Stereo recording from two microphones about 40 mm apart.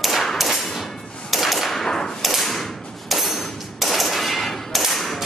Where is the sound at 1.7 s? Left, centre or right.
Centre.